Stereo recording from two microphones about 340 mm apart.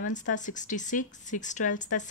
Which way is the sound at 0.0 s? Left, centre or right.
Left.